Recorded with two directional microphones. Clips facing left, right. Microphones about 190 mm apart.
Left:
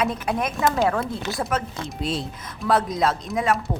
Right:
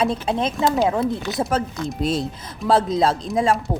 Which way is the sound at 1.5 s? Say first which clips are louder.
Right 4 dB; 30° right (ahead or behind).